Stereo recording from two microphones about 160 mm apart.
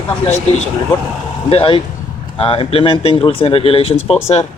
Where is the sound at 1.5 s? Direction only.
35° left (ahead or behind).